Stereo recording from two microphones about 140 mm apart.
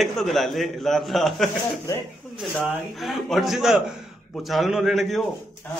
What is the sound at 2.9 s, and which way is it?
A man's voice, centre (ahead or behind).